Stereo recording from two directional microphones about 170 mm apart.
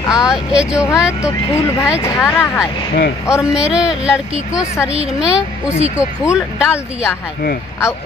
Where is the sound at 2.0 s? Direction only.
15° left (ahead or behind).